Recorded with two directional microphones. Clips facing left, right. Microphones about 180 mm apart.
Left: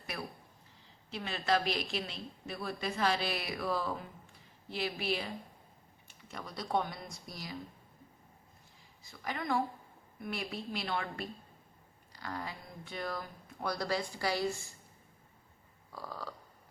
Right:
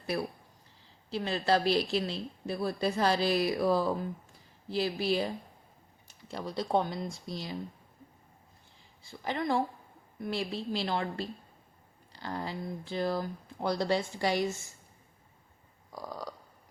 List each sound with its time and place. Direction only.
1.1 s a woman's voice: 35° right (ahead or behind)
9.0 s a woman's voice: 30° right (ahead or behind)
15.9 s a sound: 15° right (ahead or behind)